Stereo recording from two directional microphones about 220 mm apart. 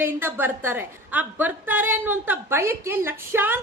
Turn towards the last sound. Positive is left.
turn(degrees=-10)  # may be behind; listen again after turning